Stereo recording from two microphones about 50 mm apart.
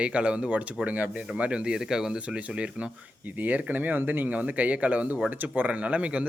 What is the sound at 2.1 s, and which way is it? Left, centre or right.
Speech, right.